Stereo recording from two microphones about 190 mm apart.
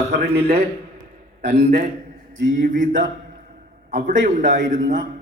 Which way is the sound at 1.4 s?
40° right (ahead or behind).